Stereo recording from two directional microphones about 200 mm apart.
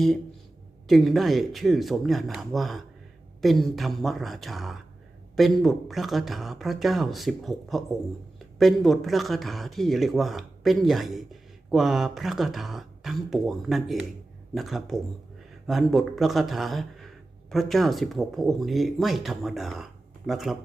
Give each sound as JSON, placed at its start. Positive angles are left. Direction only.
{"t": 0.9, "sound": "speech", "side_deg": 0}